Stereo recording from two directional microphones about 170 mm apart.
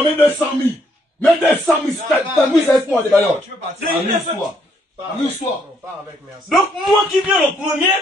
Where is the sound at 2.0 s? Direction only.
5° left (ahead or behind).